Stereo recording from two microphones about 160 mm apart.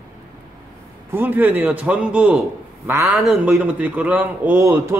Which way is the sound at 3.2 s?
Centre (ahead or behind).